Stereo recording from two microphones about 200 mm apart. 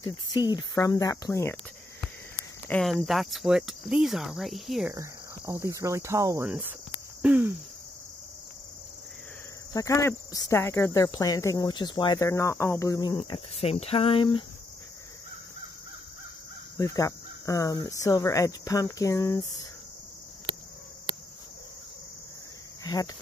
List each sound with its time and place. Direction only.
0.0 s speech: 20° left (ahead or behind)
2.7 s cricket: centre (ahead or behind)
4.9 s cricket: 15° right (ahead or behind)
7.2 s a sound: 10° right (ahead or behind)
9.8 s speech: 15° left (ahead or behind)
16.7 s speech: 15° left (ahead or behind)